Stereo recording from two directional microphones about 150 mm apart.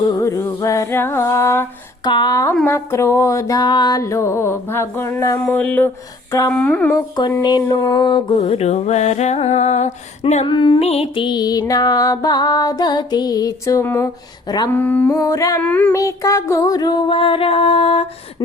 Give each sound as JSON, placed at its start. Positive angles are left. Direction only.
{"t": 0.2, "sound": "music", "side_deg": 20}
{"t": 2.0, "sound": "music", "side_deg": 30}
{"t": 6.9, "sound": "music", "side_deg": 25}
{"t": 8.4, "sound": "a sound", "side_deg": 45}
{"t": 10.4, "sound": "music", "side_deg": 35}
{"t": 14.7, "sound": "music", "side_deg": 10}